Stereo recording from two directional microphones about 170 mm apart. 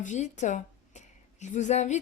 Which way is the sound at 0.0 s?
45° left (ahead or behind).